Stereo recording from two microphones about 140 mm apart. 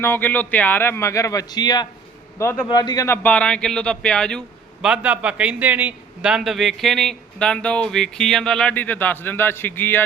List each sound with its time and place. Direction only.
0.0 s a man's voice: 15° left (ahead or behind)
3.2 s speech: 10° left (ahead or behind)
4.8 s a man's voice: 10° right (ahead or behind); by 10.0 s 15° left (ahead or behind)